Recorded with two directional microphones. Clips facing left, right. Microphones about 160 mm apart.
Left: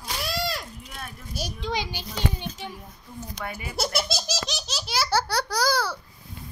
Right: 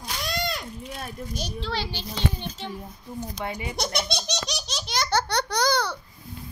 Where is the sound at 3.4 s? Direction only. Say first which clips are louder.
Right 2 dB; 20° right (ahead or behind).